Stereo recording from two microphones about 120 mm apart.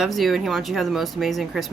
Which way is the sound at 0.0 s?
Centre (ahead or behind).